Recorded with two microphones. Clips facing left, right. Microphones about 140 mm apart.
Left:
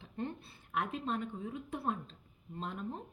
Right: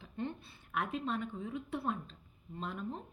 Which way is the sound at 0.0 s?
25° left (ahead or behind).